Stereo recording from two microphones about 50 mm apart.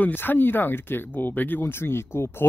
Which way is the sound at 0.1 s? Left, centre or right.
Left.